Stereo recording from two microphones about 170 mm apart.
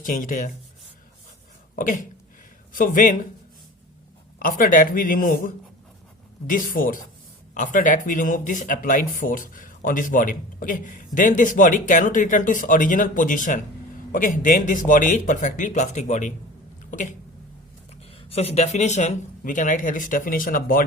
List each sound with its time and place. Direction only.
0.0 s speech: 50° left (ahead or behind)
1.7 s speech: 50° left (ahead or behind)
4.4 s speech: 55° left (ahead or behind)
6.5 s speech: 55° left (ahead or behind)
18.1 s speech: 35° left (ahead or behind); by 20.8 s 55° left (ahead or behind)